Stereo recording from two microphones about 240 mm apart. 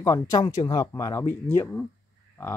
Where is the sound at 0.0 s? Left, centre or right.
Centre.